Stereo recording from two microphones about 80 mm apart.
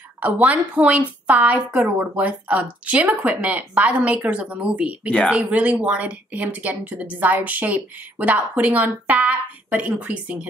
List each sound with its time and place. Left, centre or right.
0.2 s speech: centre